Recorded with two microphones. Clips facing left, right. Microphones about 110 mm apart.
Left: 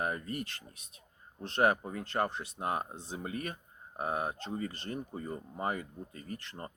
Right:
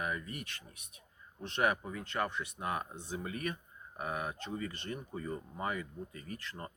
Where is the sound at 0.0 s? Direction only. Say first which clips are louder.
Left 4 dB; 40° left (ahead or behind).